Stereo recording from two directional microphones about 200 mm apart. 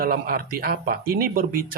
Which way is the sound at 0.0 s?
45° right (ahead or behind).